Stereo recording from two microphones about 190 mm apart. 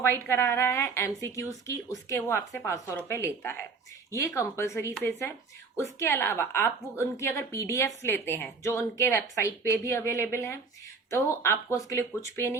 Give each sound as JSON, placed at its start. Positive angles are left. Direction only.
{"t": 0.0, "sound": "a woman's voice", "side_deg": 15}